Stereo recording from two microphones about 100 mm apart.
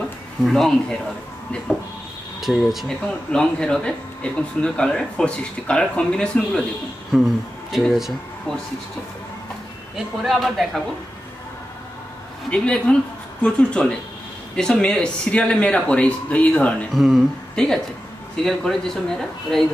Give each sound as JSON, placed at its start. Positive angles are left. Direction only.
{"t": 0.5, "sound": "speech", "side_deg": 5}
{"t": 2.4, "sound": "speech", "side_deg": 0}
{"t": 7.1, "sound": "speech", "side_deg": -5}
{"t": 9.9, "sound": "speech", "side_deg": 0}
{"t": 12.4, "sound": "speech", "side_deg": 10}
{"t": 16.9, "sound": "speech", "side_deg": 0}